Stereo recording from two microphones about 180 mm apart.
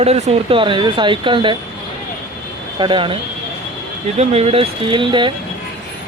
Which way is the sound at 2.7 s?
25° right (ahead or behind).